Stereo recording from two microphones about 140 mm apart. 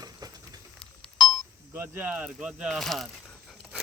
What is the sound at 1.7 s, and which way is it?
Speech, 15° right (ahead or behind).